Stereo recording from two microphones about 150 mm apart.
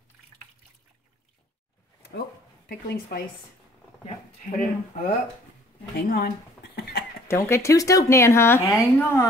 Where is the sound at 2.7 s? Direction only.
80° left.